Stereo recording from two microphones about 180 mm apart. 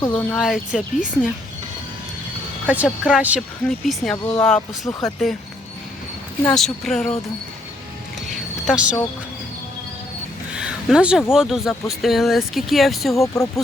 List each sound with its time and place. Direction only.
0.2 s speech: 10° left (ahead or behind)
0.4 s speech: centre (ahead or behind)
2.6 s speech: 5° right (ahead or behind)
6.4 s speech: centre (ahead or behind)
8.6 s speech: 5° right (ahead or behind)
10.5 s a sound: 5° right (ahead or behind)
11.3 s speech: centre (ahead or behind)
13.2 s speech: 15° left (ahead or behind)